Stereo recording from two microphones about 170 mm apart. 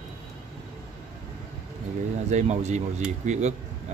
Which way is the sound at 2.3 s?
40° right (ahead or behind).